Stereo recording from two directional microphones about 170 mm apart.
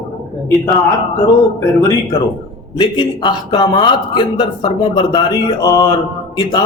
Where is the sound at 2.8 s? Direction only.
25° left (ahead or behind).